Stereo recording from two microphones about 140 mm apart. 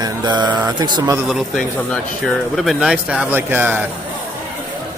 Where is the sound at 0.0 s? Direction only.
30° right (ahead or behind).